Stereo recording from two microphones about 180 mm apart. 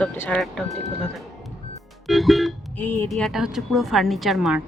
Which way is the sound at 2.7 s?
10° left (ahead or behind).